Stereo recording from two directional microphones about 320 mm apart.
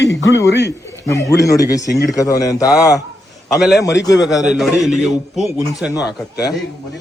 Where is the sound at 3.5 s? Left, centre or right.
Centre.